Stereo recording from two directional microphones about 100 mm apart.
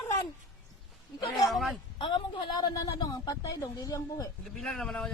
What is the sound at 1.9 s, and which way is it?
Speech, 55° left (ahead or behind).